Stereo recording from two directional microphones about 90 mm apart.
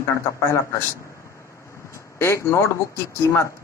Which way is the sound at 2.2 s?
30° left (ahead or behind).